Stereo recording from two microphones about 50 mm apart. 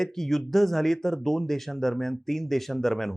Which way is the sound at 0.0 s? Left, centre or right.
Centre.